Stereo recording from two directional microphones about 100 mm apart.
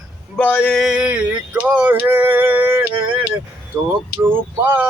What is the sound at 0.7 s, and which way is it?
Male singing, 5° right (ahead or behind).